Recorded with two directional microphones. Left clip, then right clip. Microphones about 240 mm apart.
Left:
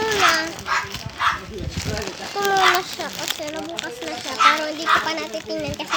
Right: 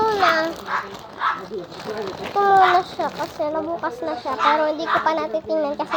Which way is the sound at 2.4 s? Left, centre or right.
Centre.